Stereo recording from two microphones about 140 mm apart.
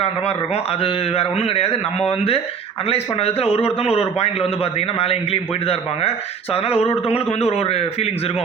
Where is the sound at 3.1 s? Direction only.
45° left (ahead or behind).